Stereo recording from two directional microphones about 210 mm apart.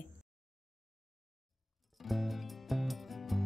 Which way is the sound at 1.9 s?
Centre (ahead or behind).